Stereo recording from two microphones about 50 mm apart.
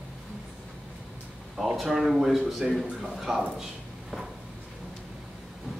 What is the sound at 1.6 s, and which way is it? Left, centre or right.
A man's voice, centre.